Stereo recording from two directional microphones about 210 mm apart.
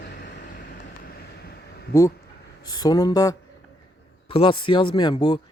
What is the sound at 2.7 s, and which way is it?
Speech, 20° left (ahead or behind).